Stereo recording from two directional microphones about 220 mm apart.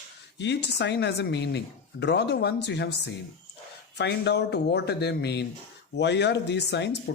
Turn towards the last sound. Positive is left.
turn(degrees=50)  # may be behind; listen again after turning